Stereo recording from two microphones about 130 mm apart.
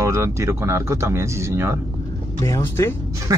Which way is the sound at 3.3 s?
25° right (ahead or behind).